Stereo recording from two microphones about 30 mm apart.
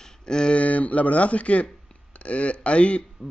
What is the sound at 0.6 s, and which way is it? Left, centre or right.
Speech, left.